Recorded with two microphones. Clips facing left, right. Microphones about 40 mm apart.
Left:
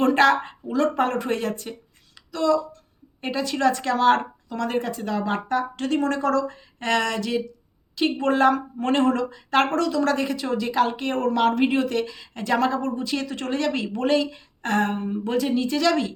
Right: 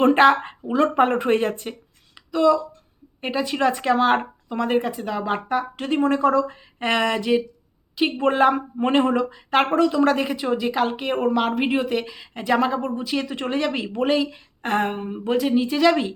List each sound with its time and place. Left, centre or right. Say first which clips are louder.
0.0 s speech: right 3 dB; right
2.3 s speech: right 3 dB; centre